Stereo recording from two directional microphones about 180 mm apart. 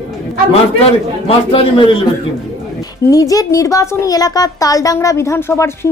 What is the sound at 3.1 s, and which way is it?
Speech, 20° left (ahead or behind).